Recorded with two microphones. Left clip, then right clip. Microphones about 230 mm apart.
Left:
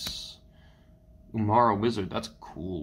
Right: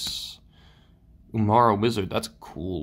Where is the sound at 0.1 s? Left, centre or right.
Right.